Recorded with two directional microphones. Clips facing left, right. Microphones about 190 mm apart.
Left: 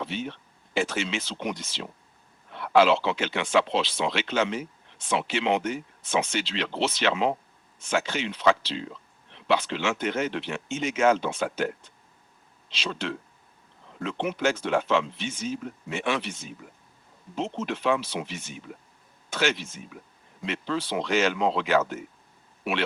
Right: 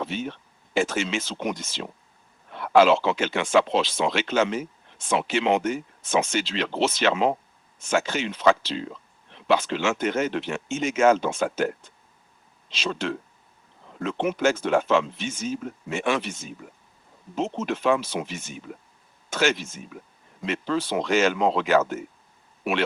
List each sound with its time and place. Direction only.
0.0 s speech: 45° right (ahead or behind)